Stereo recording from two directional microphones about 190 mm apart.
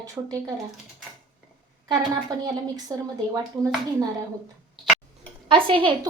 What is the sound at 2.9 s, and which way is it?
Speech, 20° right (ahead or behind).